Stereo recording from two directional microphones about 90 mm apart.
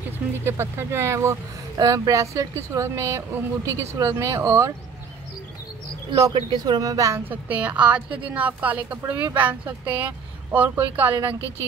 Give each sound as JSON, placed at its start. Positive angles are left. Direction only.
{"t": 0.4, "sound": "speech", "side_deg": -25}
{"t": 6.3, "sound": "speech", "side_deg": -55}
{"t": 7.2, "sound": "a woman's voice", "side_deg": -15}